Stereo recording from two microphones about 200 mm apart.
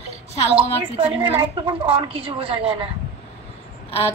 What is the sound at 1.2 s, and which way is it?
A woman's voice, 25° right (ahead or behind).